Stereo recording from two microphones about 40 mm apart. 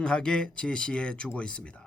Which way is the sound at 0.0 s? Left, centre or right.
Left.